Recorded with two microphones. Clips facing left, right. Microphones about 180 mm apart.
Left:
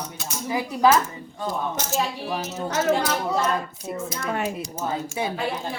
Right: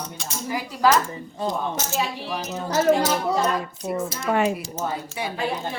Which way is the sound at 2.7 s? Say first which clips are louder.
Right 3 dB; 30° right (ahead or behind).